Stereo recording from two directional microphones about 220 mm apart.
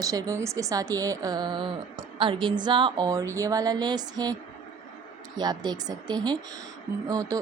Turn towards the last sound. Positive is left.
turn(degrees=-15)  # may be behind; listen again after turning